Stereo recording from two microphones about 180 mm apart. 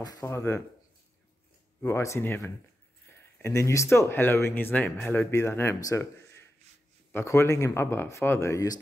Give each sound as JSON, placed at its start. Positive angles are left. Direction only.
{"t": 0.0, "sound": "speech", "side_deg": 20}
{"t": 1.8, "sound": "speech", "side_deg": 15}